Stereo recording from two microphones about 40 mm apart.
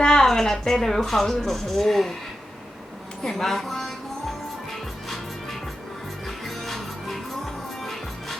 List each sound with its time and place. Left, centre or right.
0.0 s a woman's voice: centre
3.2 s a woman's voice: centre
5.0 s music: centre